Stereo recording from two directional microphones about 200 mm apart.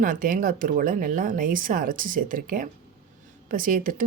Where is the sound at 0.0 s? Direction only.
40° right (ahead or behind).